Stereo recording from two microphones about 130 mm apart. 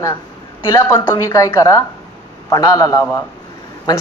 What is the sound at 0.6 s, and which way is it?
A woman's voice, 20° left (ahead or behind).